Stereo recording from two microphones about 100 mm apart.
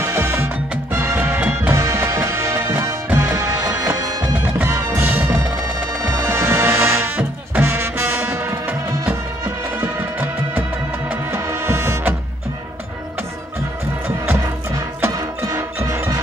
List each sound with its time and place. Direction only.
0.0 s music: 20° right (ahead or behind)
9.8 s music: 20° right (ahead or behind)
15.0 s music: 30° right (ahead or behind)